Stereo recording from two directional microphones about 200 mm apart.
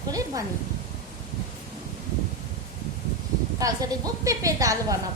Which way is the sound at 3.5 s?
15° right (ahead or behind).